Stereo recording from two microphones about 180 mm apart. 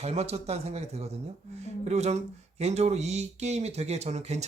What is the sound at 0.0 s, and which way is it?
Speech, 35° right (ahead or behind).